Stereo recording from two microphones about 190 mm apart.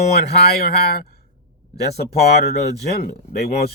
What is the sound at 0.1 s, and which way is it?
Speech, 55° left (ahead or behind).